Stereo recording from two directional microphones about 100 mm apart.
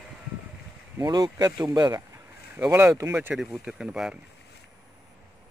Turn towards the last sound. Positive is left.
turn(degrees=-5)  # may be behind; listen again after turning